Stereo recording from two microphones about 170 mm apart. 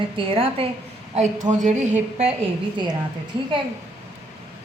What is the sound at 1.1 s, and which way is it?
A woman's voice, 45° right (ahead or behind).